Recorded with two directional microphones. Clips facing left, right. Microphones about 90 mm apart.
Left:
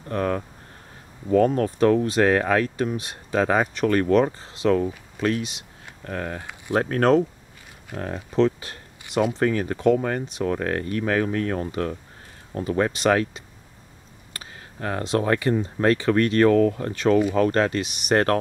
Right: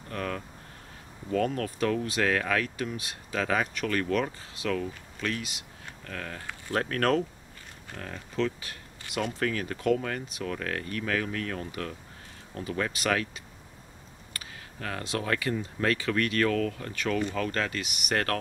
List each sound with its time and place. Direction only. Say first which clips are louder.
0.1 s speech: left 9 dB; 30° left (ahead or behind)
14.4 s speech: left 7 dB; 30° left (ahead or behind)